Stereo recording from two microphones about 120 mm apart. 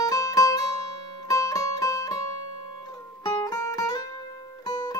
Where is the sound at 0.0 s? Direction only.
30° left (ahead or behind).